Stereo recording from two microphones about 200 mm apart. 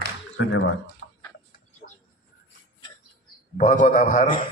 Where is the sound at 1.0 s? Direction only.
65° left (ahead or behind).